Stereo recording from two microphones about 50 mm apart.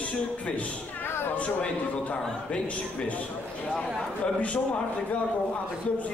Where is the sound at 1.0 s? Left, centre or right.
Left.